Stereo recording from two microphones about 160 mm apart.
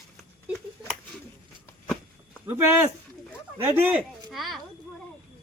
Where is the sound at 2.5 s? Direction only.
15° right (ahead or behind).